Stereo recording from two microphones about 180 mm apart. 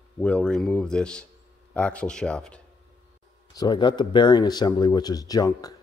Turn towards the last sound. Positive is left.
turn(degrees=20)  # may be behind; listen again after turning